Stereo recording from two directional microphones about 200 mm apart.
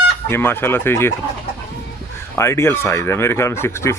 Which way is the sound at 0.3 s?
10° left (ahead or behind).